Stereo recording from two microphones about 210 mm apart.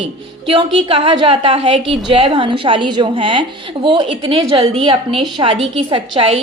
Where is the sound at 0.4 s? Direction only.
25° right (ahead or behind).